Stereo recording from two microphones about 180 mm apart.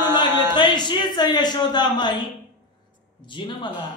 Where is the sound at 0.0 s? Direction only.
15° right (ahead or behind).